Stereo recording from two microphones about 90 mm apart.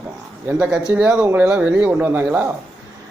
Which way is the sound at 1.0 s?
10° right (ahead or behind).